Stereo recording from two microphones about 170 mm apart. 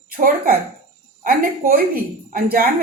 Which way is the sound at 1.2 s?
60° right (ahead or behind).